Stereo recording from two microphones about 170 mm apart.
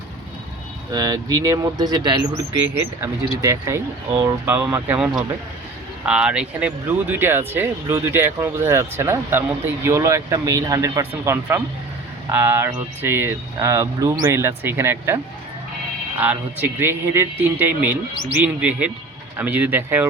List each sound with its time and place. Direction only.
0.9 s speech: 25° right (ahead or behind)
3.4 s speech: 15° right (ahead or behind)